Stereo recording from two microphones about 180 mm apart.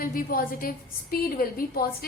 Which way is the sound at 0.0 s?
50° left (ahead or behind).